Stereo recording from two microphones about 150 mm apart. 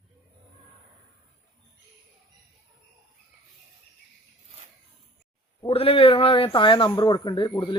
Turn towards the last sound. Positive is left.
turn(degrees=30)  # may be behind; listen again after turning